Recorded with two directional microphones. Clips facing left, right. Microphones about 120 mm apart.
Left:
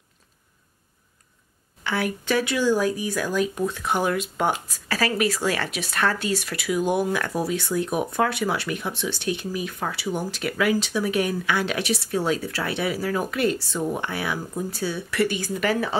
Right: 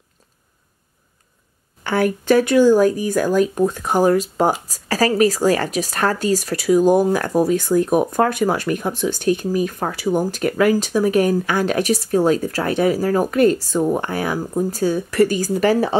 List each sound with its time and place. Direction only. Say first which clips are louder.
1.8 s speech: right 7 dB; 45° right (ahead or behind)